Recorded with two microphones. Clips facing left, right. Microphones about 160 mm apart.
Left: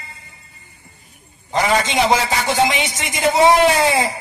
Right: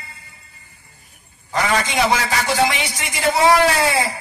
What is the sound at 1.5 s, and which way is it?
A man's voice, 25° left (ahead or behind).